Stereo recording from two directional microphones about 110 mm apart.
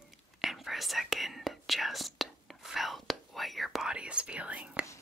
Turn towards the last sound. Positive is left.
turn(degrees=-10)  # may be behind; listen again after turning